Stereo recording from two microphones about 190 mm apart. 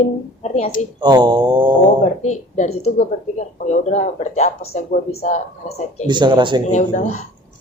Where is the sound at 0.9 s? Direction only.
20° right (ahead or behind).